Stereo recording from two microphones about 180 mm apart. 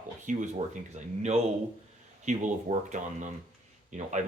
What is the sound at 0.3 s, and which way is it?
Speech, 45° right (ahead or behind).